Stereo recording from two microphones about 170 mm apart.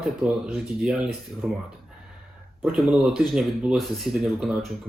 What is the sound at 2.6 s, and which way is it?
Speech, 5° right (ahead or behind).